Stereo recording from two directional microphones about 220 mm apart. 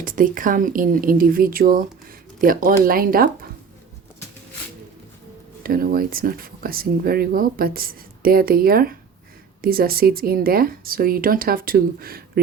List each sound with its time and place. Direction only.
0.0 s speech: 40° right (ahead or behind)
5.6 s speech: 40° right (ahead or behind)